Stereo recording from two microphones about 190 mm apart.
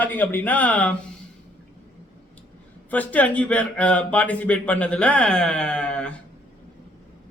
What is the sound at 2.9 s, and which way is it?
Speech, 10° left (ahead or behind).